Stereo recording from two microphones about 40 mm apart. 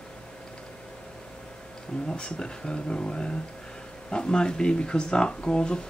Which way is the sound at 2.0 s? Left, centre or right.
Left.